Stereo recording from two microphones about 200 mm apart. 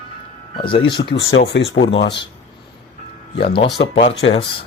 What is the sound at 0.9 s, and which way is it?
Speech, 55° left (ahead or behind).